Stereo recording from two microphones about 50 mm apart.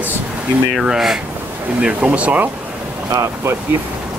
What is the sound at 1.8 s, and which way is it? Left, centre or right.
Speech, right.